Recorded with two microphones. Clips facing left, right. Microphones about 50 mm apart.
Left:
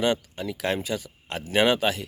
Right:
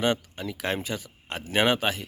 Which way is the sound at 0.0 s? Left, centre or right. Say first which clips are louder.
Left 1 dB; right.